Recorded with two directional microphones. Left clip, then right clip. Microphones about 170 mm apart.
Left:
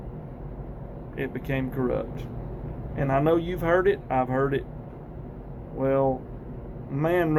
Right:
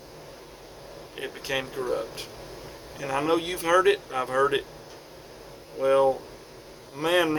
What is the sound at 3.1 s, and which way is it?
Speech, 20° right (ahead or behind).